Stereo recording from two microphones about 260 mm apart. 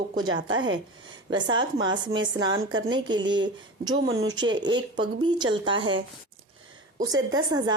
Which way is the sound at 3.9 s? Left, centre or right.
Right.